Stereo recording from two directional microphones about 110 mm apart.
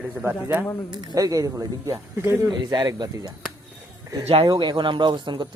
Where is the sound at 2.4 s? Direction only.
40° right (ahead or behind).